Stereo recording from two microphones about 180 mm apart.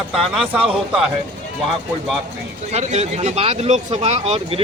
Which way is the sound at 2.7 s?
35° right (ahead or behind).